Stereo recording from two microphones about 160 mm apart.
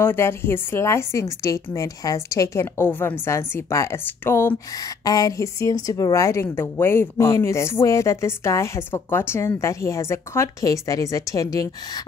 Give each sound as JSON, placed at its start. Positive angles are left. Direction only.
{"t": 0.0, "sound": "a woman's voice", "side_deg": 15}